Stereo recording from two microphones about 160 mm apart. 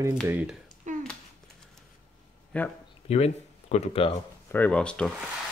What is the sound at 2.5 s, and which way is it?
Speech, 10° left (ahead or behind).